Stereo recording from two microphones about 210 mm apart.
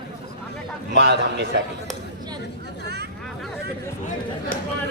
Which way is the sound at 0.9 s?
55° right (ahead or behind).